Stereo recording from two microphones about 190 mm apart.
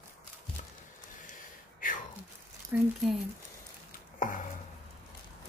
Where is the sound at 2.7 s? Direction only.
10° right (ahead or behind).